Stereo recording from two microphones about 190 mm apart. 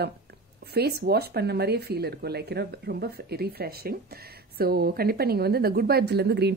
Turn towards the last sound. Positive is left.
turn(degrees=-60)  # may be behind; listen again after turning